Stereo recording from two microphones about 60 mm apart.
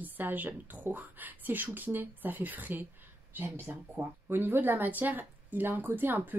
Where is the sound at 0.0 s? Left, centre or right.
Right.